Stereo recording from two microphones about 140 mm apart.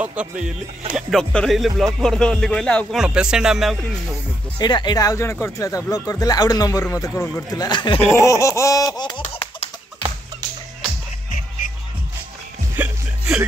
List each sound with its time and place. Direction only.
0.0 s speech: 10° right (ahead or behind); by 3.0 s 5° left (ahead or behind)
3.0 s speech: 5° right (ahead or behind)
4.6 s a man's voice: 30° left (ahead or behind)
7.6 s speech: 35° left (ahead or behind)
8.1 s a man's voice: 20° left (ahead or behind)
12.7 s music: 15° right (ahead or behind)